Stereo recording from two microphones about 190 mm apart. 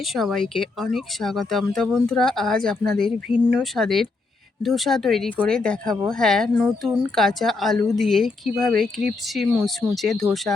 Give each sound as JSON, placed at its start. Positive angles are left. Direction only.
{"t": 0.0, "sound": "speech", "side_deg": 0}